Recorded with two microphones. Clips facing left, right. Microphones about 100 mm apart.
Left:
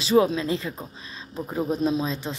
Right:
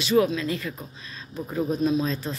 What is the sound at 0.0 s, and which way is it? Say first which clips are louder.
Speech: left 1 dB; 30° left (ahead or behind).